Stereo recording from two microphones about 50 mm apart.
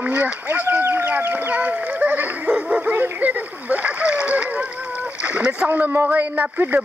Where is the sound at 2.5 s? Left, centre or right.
Centre.